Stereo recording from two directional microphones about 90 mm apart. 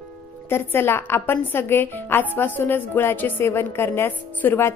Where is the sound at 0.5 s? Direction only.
25° left (ahead or behind).